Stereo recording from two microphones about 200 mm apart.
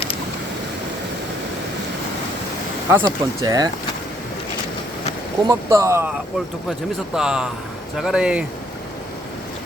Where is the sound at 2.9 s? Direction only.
20° right (ahead or behind).